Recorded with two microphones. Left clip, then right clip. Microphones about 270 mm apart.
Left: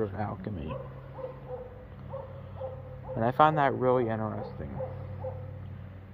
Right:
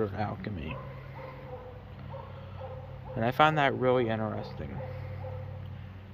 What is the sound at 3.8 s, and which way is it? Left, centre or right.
Speech, centre.